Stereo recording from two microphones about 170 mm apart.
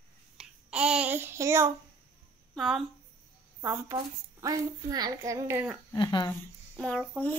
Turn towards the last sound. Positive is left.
turn(degrees=5)  # may be behind; listen again after turning